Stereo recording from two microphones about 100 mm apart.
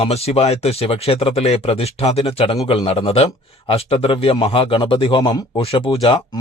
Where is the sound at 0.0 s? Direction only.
90° left.